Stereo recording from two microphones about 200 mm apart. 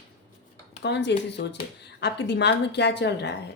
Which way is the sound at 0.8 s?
60° left (ahead or behind).